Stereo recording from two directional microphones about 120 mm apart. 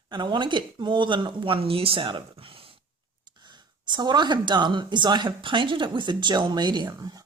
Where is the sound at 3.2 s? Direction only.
40° right (ahead or behind).